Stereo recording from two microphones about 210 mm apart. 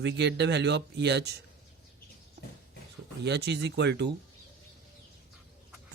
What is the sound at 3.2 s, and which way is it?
Speech, 55° right (ahead or behind).